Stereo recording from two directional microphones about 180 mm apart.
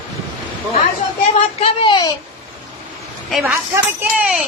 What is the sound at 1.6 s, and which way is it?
Speech, 25° left (ahead or behind).